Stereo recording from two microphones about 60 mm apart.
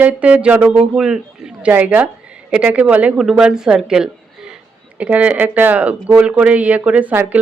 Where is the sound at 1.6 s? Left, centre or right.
Right.